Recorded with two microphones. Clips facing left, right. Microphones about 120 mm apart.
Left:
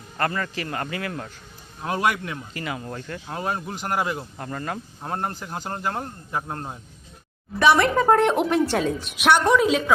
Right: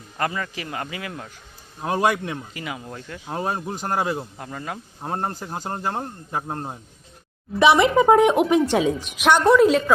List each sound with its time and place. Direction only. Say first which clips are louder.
0.2 s a man's voice: left 1 dB; 5° right (ahead or behind)
1.8 s speech: right 3 dB; 25° right (ahead or behind)
2.5 s speech: left 2 dB; 5° right (ahead or behind)
3.3 s speech: right 2 dB; 25° right (ahead or behind)
4.4 s a man's voice: left 2 dB; 5° right (ahead or behind)
5.0 s speech: right 2 dB; 25° right (ahead or behind)
5.3 s speech: right 2 dB; 35° right (ahead or behind)
5.6 s speech: right 1 dB; 25° right (ahead or behind)
7.8 s a man's voice: right 3 dB; 5° right (ahead or behind)
9.2 s a man's voice: right 3 dB; 10° left (ahead or behind)